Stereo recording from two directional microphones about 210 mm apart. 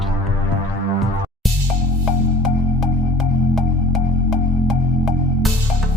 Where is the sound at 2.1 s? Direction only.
Centre (ahead or behind).